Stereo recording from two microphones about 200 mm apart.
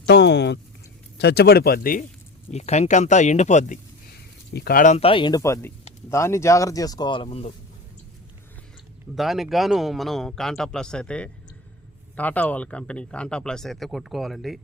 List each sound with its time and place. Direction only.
0.0 s a sound: 60° left (ahead or behind)
1.2 s speech: 55° left (ahead or behind)
2.5 s speech: 35° left (ahead or behind)
4.5 s speech: 50° left (ahead or behind); by 7.5 s 30° left (ahead or behind)
9.1 s a man's voice: centre (ahead or behind)